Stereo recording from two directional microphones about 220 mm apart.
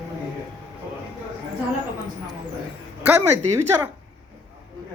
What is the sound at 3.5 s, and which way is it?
Speech, 10° right (ahead or behind).